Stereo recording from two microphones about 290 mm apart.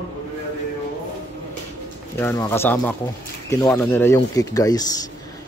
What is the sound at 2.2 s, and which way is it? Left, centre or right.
Speech, centre.